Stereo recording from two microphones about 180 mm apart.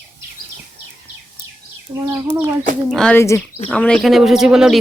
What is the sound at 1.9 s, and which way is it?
Speech, 25° right (ahead or behind).